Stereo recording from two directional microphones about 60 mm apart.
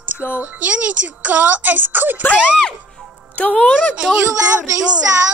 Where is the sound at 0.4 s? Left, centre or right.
Right.